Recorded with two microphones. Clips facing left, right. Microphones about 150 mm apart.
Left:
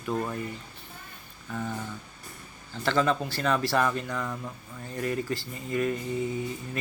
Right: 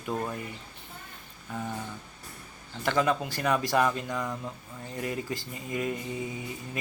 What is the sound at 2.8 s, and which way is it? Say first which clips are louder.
A man's voice: left 1 dB; 15° right (ahead or behind).